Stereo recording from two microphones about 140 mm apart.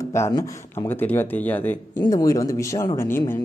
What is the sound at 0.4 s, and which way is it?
Speech, 15° left (ahead or behind).